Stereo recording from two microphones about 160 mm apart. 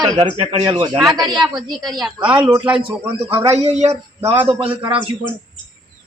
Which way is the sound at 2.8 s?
35° right (ahead or behind).